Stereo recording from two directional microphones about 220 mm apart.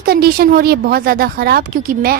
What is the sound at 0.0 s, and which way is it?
Speech, 45° right (ahead or behind).